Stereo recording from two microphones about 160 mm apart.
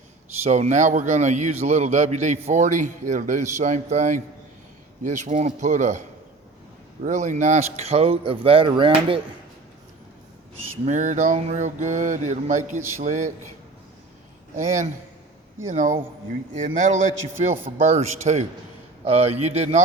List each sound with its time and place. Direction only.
0.4 s mantra: 45° right (ahead or behind)
7.0 s a man's voice: 50° right (ahead or behind); by 9.2 s 35° right (ahead or behind)
10.8 s mantra: 50° right (ahead or behind)
15.6 s mantra: 55° right (ahead or behind)
19.0 s a man's voice: 40° right (ahead or behind)